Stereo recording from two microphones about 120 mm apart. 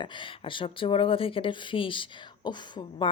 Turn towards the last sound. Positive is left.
turn(degrees=40)  # may be behind; listen again after turning